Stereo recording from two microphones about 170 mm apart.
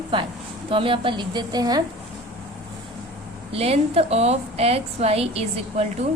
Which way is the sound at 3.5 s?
35° right (ahead or behind).